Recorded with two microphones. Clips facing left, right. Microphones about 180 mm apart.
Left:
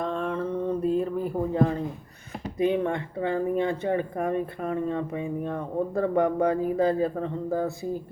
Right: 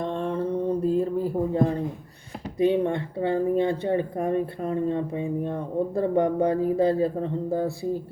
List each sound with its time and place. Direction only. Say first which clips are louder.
0.1 s mantra: right 2 dB; 30° right (ahead or behind)
2.6 s speech: right 3 dB; 30° right (ahead or behind)